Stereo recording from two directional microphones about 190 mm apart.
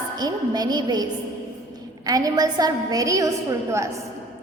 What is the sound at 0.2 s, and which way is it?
Speech, 20° right (ahead or behind).